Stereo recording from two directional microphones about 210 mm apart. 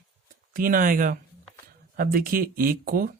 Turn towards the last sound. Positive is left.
turn(degrees=-45)  # may be behind; listen again after turning